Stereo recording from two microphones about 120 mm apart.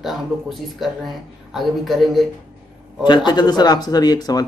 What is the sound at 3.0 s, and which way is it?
Speech, 40° left (ahead or behind).